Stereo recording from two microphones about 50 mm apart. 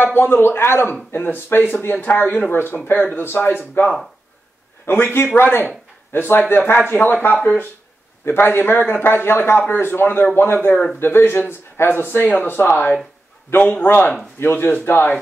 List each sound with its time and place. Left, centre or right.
0.0 s a man's voice: left
3.8 s a man's voice: left
8.3 s a man's voice: left
13.6 s speech: left
13.8 s a man's voice: left